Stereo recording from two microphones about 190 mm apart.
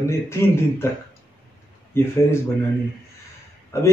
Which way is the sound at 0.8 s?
15° left (ahead or behind).